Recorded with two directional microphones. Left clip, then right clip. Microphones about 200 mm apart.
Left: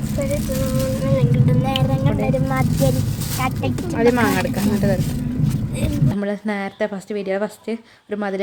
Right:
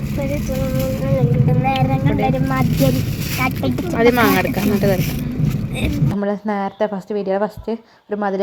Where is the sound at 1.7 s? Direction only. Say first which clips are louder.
Right 3 dB; centre (ahead or behind).